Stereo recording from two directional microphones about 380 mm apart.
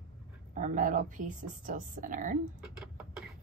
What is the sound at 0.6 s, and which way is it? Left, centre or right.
A woman's voice, centre.